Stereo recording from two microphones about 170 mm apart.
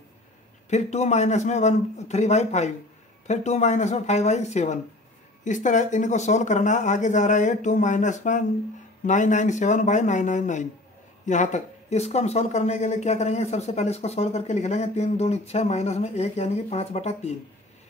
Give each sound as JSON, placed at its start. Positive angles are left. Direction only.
{"t": 0.7, "sound": "speech", "side_deg": 40}